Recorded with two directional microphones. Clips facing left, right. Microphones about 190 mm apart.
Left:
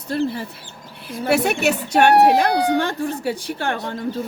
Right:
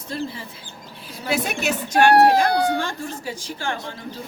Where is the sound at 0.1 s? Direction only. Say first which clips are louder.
Left 7 dB; 60° left (ahead or behind).